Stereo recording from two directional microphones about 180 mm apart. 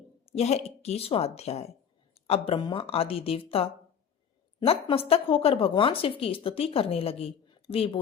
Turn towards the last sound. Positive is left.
turn(degrees=30)  # may be behind; listen again after turning